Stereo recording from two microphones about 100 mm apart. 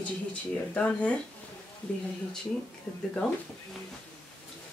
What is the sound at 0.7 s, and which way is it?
Speech, 15° left (ahead or behind).